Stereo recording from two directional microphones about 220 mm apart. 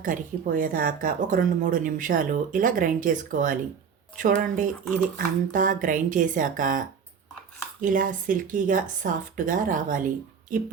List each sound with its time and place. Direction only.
0.0 s speech: 40° right (ahead or behind)